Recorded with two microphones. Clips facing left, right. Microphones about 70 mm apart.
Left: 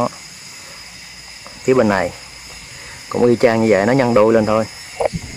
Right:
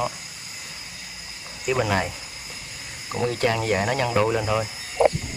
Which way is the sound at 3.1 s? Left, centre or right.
Left.